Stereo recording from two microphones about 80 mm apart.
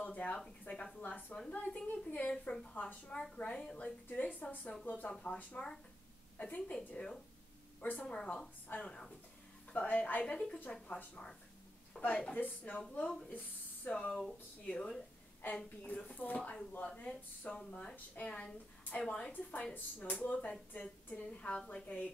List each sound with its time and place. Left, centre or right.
0.0 s a sound: centre
0.7 s a woman's voice: left
8.6 s speech: left
10.2 s a woman's voice: centre
13.8 s a woman's voice: centre